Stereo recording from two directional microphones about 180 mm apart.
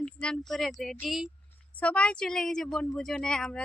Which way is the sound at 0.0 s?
5° left (ahead or behind).